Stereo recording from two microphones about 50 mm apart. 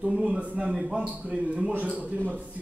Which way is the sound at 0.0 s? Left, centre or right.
Centre.